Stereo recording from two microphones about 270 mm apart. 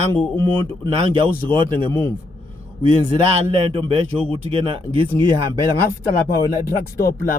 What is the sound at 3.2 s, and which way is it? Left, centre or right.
A man's voice, right.